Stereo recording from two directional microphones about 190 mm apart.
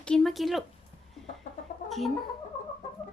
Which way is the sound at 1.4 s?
40° left (ahead or behind).